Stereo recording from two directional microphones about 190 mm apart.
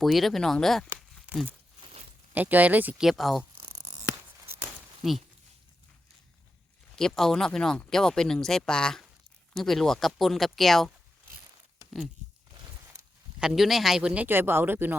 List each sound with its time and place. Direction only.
0.0 s speech: centre (ahead or behind)
3.5 s a sound: 30° right (ahead or behind)
5.0 s speech: centre (ahead or behind)
6.9 s speech: centre (ahead or behind)
13.4 s speech: 5° right (ahead or behind)